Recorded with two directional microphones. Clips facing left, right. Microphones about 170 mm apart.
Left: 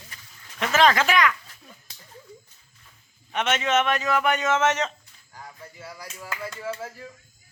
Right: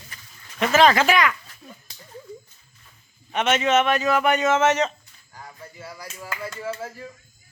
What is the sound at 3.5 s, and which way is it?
Speech, 10° right (ahead or behind).